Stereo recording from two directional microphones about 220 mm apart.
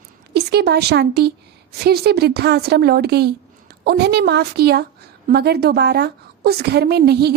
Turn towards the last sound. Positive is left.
turn(degrees=-45)  # may be behind; listen again after turning